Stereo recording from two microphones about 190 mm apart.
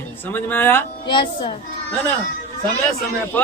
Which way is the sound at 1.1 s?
25° left (ahead or behind).